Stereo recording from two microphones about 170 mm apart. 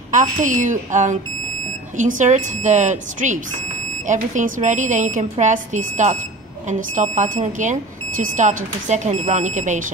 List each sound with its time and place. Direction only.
0.1 s speech: 50° right (ahead or behind)